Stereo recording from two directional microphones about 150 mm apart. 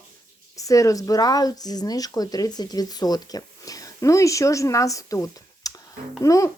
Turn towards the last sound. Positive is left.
turn(degrees=20)  # may be behind; listen again after turning